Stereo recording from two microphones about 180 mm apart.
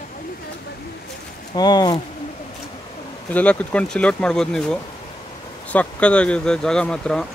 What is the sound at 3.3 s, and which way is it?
Speech, 5° left (ahead or behind).